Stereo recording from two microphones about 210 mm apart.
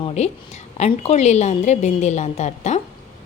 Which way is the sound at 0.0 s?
30° left (ahead or behind).